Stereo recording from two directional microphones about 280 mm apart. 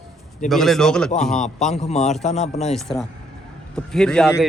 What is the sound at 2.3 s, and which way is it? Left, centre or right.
Speech, left.